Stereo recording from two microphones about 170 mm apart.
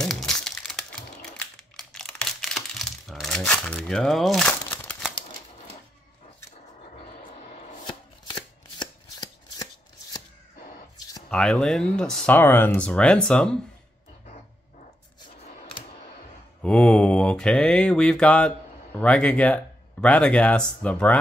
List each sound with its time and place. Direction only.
0.0 s crumpling: centre (ahead or behind)
1.3 s a sound: 5° left (ahead or behind)
8.7 s shuffling cards: 25° left (ahead or behind)
11.2 s speech: 5° left (ahead or behind)
16.6 s mantra: 5° left (ahead or behind)